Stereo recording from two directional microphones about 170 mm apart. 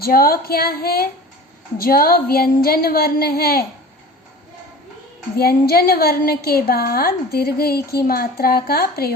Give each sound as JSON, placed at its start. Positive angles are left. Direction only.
{"t": 0.0, "sound": "a woman's voice", "side_deg": 60}
{"t": 5.4, "sound": "a woman's voice", "side_deg": 65}